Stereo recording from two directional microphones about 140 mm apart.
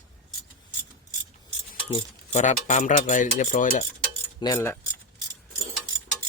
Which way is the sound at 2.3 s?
60° left (ahead or behind).